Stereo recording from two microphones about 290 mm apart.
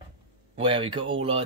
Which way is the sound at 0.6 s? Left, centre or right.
Centre.